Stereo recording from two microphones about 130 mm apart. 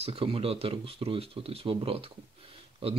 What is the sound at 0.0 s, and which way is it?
Speech, 45° right (ahead or behind).